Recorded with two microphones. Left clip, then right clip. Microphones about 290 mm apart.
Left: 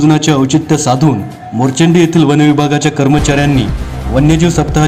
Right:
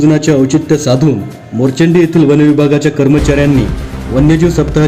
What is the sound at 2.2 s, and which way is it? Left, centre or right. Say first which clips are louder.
Speech: right 2 dB; centre.